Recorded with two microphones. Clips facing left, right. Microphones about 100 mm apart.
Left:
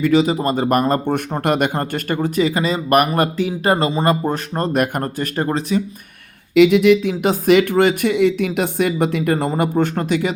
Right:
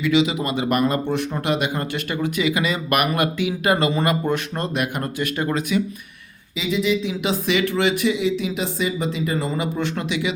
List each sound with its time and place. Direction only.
0.0 s speech: 45° left (ahead or behind)
6.5 s speech: 65° left (ahead or behind); by 10.3 s 45° left (ahead or behind)